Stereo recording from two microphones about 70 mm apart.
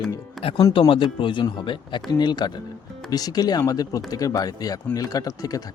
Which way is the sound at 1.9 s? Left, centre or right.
Left.